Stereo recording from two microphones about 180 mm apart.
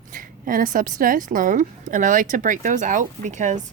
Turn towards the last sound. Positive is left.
turn(degrees=-45)  # may be behind; listen again after turning